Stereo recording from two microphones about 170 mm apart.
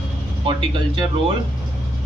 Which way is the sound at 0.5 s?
30° right (ahead or behind).